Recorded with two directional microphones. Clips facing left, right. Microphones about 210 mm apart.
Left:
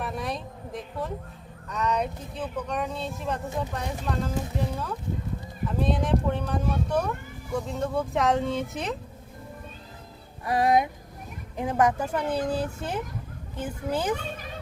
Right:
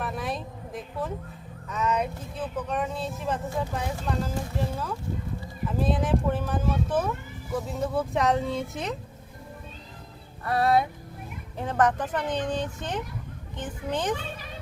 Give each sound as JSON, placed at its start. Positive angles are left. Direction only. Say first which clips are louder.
{"t": 0.0, "sound": "a sound", "louder": "even", "side_deg": 0}
{"t": 1.7, "sound": "speech", "louder": "even", "side_deg": 0}
{"t": 10.4, "sound": "speech", "louder": "left 1 dB", "side_deg": 15}